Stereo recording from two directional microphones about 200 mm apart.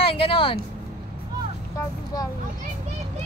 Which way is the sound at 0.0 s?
25° left (ahead or behind).